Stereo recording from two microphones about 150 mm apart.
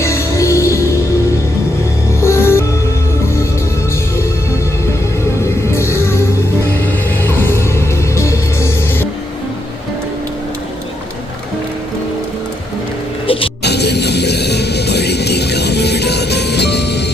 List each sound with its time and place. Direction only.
0.0 s music: 20° left (ahead or behind)
2.2 s music: 15° left (ahead or behind)
5.4 s music: 15° left (ahead or behind)
7.2 s music: 15° left (ahead or behind)
13.2 s music: 35° left (ahead or behind)
13.6 s music: 90° left